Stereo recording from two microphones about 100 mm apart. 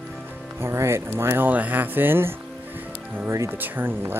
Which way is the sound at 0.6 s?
25° right (ahead or behind).